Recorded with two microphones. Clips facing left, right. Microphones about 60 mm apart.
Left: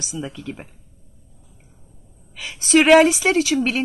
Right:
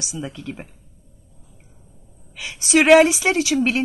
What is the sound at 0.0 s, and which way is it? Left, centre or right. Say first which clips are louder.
Speech: left 1 dB; centre.